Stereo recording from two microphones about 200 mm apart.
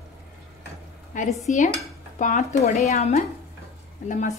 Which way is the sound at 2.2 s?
40° left (ahead or behind).